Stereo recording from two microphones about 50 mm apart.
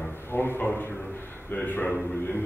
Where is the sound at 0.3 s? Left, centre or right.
Left.